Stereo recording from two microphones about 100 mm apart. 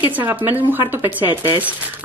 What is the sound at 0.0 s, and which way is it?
Speech, 20° right (ahead or behind).